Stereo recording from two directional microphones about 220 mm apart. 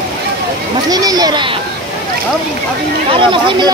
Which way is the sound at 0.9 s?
15° right (ahead or behind).